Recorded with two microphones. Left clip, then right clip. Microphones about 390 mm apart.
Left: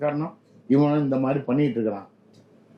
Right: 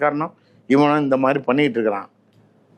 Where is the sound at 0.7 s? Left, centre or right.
Centre.